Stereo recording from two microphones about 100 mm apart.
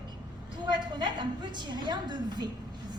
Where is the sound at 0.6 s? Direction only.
50° right (ahead or behind).